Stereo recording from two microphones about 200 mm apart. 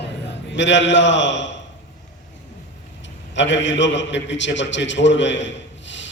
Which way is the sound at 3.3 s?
65° left (ahead or behind).